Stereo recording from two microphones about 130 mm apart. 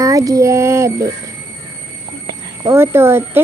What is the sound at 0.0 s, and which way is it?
Music, 25° right (ahead or behind).